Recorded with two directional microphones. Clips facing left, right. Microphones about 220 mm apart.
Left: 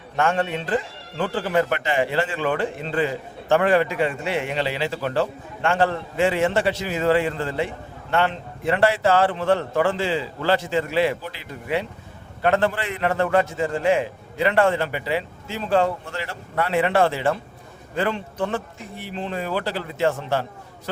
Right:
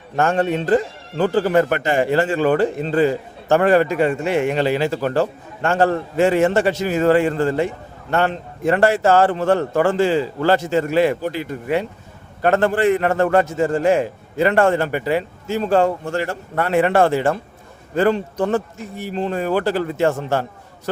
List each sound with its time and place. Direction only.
0.2 s a man's voice: 40° right (ahead or behind)